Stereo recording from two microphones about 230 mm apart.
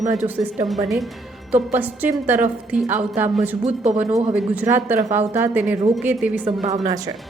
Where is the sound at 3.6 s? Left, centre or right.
Right.